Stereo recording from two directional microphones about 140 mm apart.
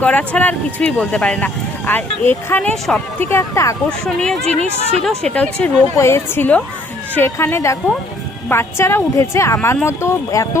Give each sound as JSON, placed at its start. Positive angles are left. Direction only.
{"t": 0.0, "sound": "speech", "side_deg": 10}
{"t": 3.2, "sound": "a woman's voice", "side_deg": 20}
{"t": 4.0, "sound": "speech", "side_deg": 5}
{"t": 5.6, "sound": "a woman's voice", "side_deg": 20}